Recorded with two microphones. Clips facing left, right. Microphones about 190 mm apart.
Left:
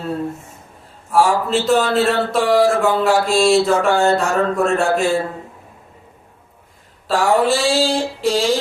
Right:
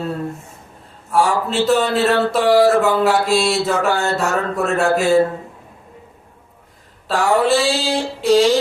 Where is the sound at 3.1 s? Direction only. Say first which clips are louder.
Left 2 dB; 45° left (ahead or behind).